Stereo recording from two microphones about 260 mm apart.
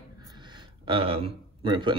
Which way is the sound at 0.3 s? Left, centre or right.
Centre.